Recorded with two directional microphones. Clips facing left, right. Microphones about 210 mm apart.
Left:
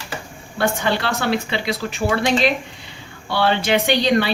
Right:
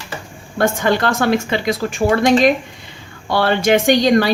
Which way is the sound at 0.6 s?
45° right (ahead or behind).